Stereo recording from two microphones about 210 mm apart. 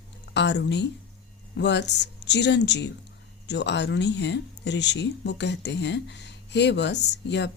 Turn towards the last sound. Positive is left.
turn(degrees=55)  # may be behind; listen again after turning